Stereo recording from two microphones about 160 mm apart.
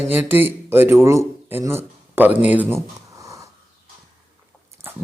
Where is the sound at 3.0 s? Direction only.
20° right (ahead or behind).